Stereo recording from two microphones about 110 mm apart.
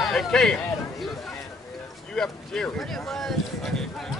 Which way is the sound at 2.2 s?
5° left (ahead or behind).